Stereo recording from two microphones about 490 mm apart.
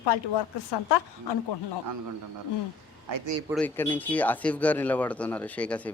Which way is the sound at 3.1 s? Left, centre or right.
Right.